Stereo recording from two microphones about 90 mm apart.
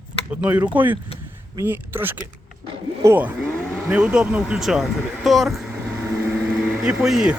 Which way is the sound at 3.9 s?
15° right (ahead or behind).